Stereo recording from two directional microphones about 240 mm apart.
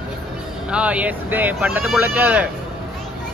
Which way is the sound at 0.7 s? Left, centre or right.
Centre.